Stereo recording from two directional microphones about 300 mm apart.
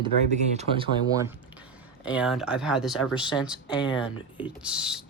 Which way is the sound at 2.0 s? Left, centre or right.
Centre.